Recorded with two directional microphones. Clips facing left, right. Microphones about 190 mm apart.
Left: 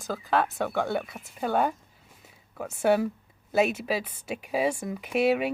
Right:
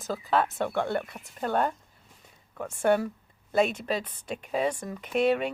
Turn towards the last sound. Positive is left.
turn(degrees=10)  # may be behind; listen again after turning